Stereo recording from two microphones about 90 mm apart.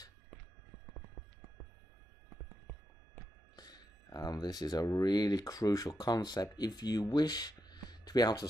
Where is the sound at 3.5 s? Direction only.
50° left (ahead or behind).